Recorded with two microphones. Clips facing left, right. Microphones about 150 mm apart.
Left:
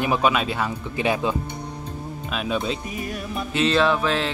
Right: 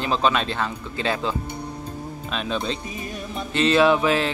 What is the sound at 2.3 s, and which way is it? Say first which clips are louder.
Speech: left 1 dB; 5° left (ahead or behind).